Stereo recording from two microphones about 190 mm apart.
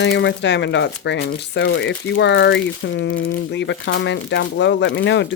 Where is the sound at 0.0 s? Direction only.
70° left (ahead or behind).